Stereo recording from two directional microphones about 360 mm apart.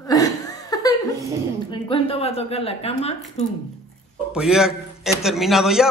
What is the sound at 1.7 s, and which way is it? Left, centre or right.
A woman's voice, centre.